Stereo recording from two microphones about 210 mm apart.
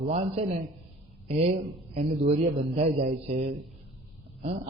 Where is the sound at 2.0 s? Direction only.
30° right (ahead or behind).